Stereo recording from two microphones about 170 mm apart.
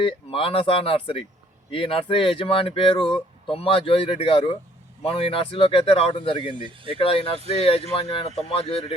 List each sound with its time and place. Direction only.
0.0 s speech: 35° left (ahead or behind)